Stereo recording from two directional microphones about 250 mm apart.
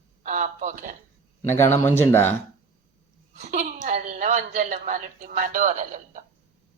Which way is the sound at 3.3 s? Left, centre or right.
Right.